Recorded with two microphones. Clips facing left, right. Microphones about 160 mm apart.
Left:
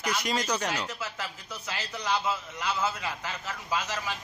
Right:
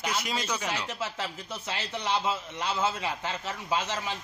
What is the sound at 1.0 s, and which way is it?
A man's voice, 25° right (ahead or behind).